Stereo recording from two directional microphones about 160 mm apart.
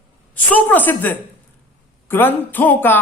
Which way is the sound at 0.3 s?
10° left (ahead or behind).